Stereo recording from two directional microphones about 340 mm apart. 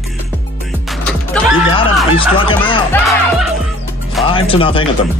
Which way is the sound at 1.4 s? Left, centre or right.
Centre.